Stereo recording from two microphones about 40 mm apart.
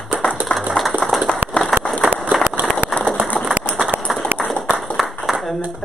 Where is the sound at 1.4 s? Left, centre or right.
Right.